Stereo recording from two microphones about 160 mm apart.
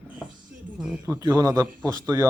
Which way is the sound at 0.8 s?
10° right (ahead or behind).